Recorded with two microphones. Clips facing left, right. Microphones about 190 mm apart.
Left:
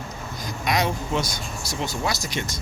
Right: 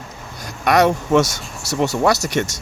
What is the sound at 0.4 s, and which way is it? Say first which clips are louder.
Speech: right 9 dB; 65° right (ahead or behind).